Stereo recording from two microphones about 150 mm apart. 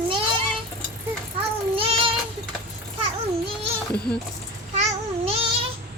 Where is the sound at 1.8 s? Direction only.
35° right (ahead or behind).